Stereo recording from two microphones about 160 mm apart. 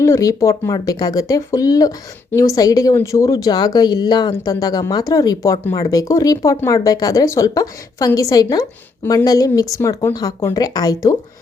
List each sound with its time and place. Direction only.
0.0 s speech: 20° left (ahead or behind)